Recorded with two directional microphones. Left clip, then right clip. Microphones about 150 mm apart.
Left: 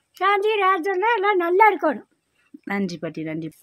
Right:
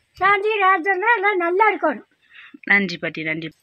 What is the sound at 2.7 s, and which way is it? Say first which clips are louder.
Speech: right 10 dB; 10° left (ahead or behind).